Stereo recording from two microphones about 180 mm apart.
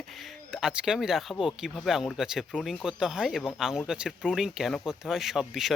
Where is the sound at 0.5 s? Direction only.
5° right (ahead or behind).